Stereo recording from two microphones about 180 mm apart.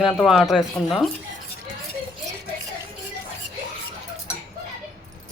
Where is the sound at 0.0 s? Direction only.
Centre (ahead or behind).